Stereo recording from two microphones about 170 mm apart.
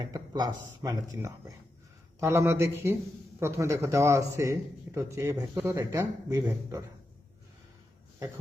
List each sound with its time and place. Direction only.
0.0 s a man's voice: 25° right (ahead or behind)